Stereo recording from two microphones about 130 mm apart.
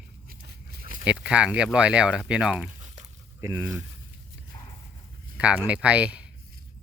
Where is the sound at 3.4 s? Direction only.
20° right (ahead or behind).